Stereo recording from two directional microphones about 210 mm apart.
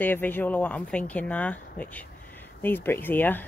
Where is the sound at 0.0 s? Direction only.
10° left (ahead or behind).